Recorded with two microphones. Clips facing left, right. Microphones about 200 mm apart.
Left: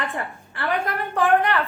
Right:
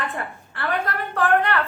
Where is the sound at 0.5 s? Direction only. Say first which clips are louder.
Left 1 dB; 15° left (ahead or behind).